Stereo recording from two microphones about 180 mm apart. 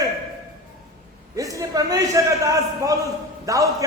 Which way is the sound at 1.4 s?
20° right (ahead or behind).